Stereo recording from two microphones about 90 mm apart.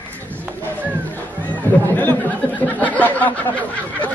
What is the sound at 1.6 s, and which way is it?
Speech, 20° left (ahead or behind).